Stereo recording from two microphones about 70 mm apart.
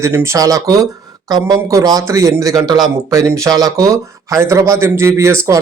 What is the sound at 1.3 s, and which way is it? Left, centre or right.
Speech, right.